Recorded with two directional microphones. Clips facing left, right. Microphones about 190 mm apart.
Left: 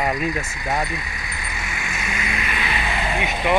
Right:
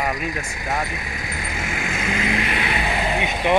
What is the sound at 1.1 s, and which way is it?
Vehicle, 45° right (ahead or behind).